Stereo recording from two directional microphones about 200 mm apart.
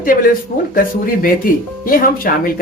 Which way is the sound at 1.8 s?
45° left (ahead or behind).